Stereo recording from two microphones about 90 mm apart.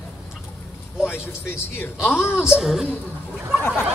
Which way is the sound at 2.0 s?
25° left (ahead or behind).